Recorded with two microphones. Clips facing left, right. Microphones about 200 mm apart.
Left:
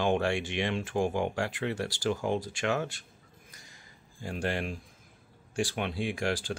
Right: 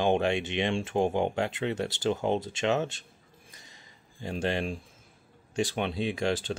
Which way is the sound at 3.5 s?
20° right (ahead or behind).